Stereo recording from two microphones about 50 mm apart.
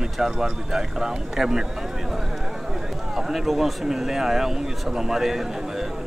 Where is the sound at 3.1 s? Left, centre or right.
Centre.